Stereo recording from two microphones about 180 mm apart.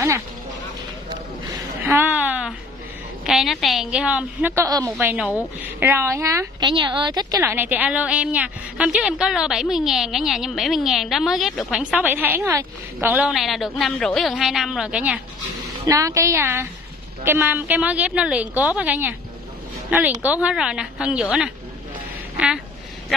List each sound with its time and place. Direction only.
1.8 s a sound: 10° right (ahead or behind)
3.3 s a woman's voice: centre (ahead or behind); by 4.9 s 20° right (ahead or behind)
4.9 s a woman's voice: 10° right (ahead or behind)
15.9 s a woman's voice: 15° right (ahead or behind)